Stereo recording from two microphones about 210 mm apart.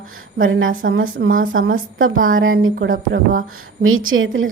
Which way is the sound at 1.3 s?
40° right (ahead or behind).